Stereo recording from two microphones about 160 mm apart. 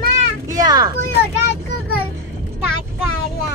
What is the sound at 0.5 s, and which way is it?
Speech, 25° right (ahead or behind).